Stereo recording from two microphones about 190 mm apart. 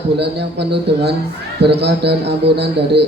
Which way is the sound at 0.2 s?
60° right (ahead or behind).